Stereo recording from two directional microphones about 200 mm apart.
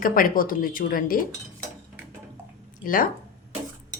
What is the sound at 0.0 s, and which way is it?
Speech, 45° left (ahead or behind).